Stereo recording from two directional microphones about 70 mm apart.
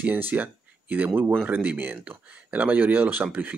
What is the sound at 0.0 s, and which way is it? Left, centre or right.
Speech, right.